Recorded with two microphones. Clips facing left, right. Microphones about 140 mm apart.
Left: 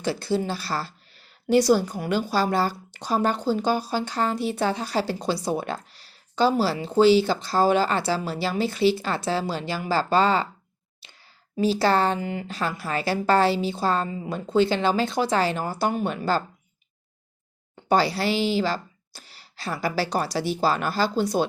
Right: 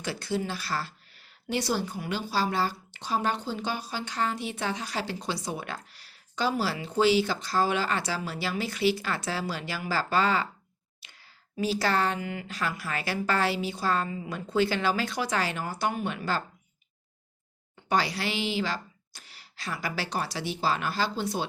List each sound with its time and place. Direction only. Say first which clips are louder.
0.0 s a woman's voice: left 6 dB; 30° left (ahead or behind)
11.0 s a sound: left 3 dB; 30° left (ahead or behind)
11.5 s a woman's voice: left 6 dB; 30° left (ahead or behind)
17.8 s a woman's voice: left 6 dB; 35° left (ahead or behind)